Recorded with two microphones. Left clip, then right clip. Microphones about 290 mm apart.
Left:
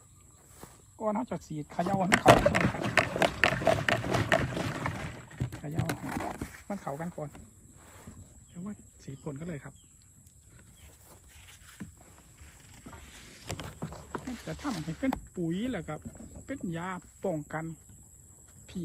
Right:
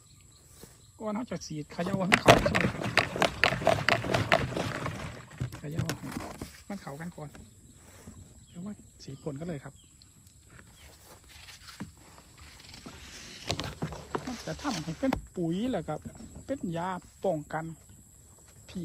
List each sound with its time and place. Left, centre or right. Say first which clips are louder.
0.9 s speech: left 3 dB; centre
4.5 s boat: right 2 dB; centre
4.8 s horse: left 1 dB; centre
5.9 s a sound: left 5 dB; centre
6.7 s snake: left 5 dB; centre
6.9 s speech: left 5 dB; centre
7.9 s wild animals: left 1 dB; centre
8.5 s speech: even; centre
11.1 s a sound: right 5 dB; right
13.6 s clip-clop: right 5 dB; right
14.7 s speech: right 2 dB; right
18.7 s a sound: even; centre